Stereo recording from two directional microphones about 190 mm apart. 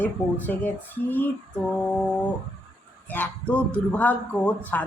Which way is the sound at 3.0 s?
10° left (ahead or behind).